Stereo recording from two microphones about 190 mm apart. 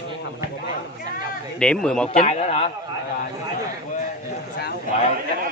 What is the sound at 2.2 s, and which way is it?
Speech, 35° left (ahead or behind).